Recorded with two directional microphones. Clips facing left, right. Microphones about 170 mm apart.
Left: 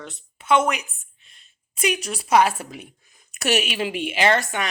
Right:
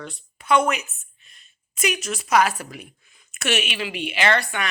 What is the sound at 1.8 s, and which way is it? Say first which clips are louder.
Speech: left 1 dB; 30° left (ahead or behind).